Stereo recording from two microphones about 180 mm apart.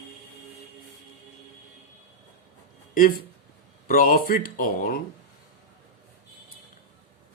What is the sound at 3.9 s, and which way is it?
Speech, 50° left (ahead or behind).